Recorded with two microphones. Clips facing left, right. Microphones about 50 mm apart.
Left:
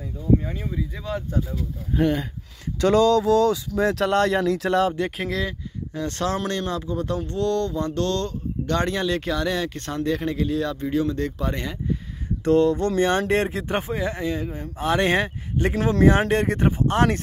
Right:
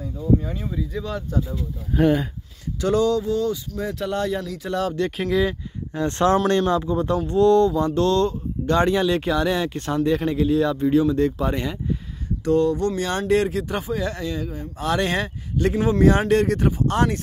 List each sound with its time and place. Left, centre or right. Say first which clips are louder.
0.4 s speech: right 1 dB; centre
2.0 s speech: right 3 dB; centre
2.8 s a sound: left 3 dB; left
3.3 s speech: left 5 dB; left
5.0 s speech: right 2 dB; centre
5.3 s speech: right 6 dB; centre
5.9 s speech: right 7 dB; right; by 11.8 s centre
12.4 s speech: left 1 dB; left
14.0 s speech: left 1 dB; left